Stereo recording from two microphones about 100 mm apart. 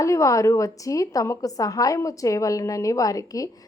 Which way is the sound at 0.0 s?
30° left (ahead or behind).